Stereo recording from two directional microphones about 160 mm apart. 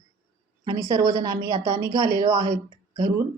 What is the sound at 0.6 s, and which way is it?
A woman's voice, 25° right (ahead or behind).